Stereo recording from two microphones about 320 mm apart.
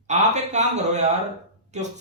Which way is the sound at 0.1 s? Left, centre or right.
Right.